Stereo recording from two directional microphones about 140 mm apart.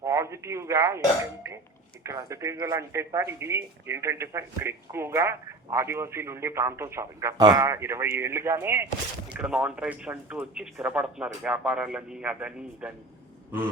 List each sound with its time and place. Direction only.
0.0 s speech: 20° right (ahead or behind)
2.0 s speech: 25° right (ahead or behind)